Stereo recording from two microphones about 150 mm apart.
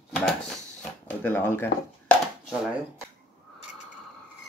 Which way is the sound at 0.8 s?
10° left (ahead or behind).